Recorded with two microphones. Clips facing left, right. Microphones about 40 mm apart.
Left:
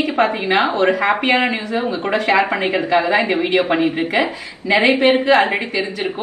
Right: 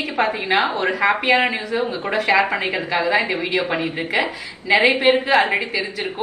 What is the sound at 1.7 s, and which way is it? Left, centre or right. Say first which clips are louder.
Speech: left 2 dB; left.